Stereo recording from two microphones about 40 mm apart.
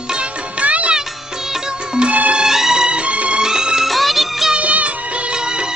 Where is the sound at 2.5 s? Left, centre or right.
Centre; by 3.4 s right.